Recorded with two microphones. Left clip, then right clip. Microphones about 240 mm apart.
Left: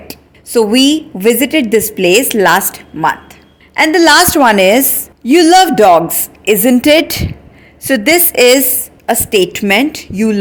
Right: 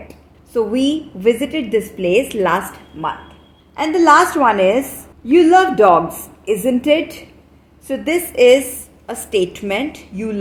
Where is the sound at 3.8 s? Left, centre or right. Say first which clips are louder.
Left 4 dB; left.